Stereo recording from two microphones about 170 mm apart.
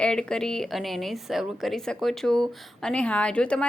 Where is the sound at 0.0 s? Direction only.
5° left (ahead or behind).